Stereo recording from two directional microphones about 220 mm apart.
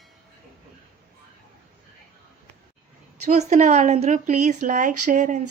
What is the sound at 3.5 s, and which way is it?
A woman's voice, 35° right (ahead or behind).